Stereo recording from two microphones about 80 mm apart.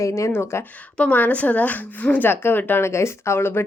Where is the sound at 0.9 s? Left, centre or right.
Centre.